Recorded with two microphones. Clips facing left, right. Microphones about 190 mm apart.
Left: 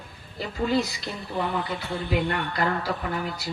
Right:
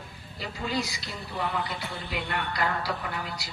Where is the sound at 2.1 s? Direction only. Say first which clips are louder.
Left 6 dB; 40° left (ahead or behind).